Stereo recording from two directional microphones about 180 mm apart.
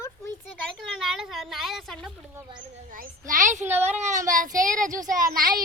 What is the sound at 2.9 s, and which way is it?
A child's voice, 50° right (ahead or behind).